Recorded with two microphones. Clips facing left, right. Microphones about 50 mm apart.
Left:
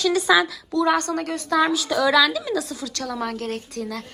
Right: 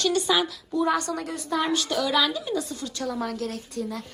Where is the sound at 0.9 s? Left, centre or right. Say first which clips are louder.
Left 4 dB; left.